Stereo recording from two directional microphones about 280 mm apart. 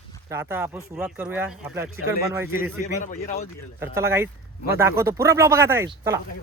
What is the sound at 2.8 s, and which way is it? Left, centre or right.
Speech, left.